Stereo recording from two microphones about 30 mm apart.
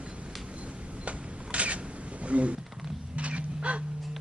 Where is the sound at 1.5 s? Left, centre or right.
Right.